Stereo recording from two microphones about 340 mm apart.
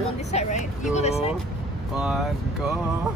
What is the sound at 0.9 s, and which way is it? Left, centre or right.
Music, centre.